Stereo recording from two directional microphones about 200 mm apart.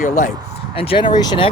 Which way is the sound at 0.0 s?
40° left (ahead or behind).